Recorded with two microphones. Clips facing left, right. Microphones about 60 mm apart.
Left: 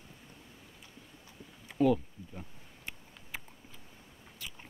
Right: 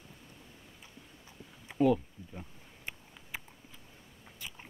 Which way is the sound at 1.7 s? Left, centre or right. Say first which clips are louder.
Even; centre.